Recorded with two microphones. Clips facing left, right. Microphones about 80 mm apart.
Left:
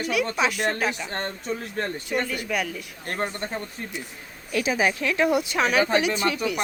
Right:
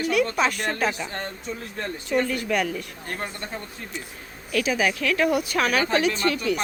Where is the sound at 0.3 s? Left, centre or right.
Centre.